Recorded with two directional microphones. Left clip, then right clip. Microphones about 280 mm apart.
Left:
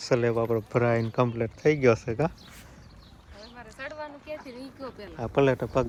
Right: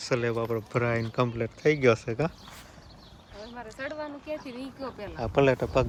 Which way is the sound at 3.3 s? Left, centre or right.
Right.